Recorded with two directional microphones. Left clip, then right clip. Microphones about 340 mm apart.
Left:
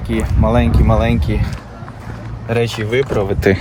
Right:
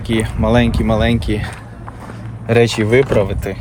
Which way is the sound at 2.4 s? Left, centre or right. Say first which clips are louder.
Right 5 dB; centre.